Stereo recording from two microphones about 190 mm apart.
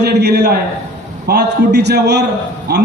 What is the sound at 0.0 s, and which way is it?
A man's voice, 60° right (ahead or behind).